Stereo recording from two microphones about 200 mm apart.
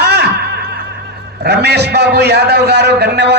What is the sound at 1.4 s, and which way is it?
A man's voice, 55° right (ahead or behind).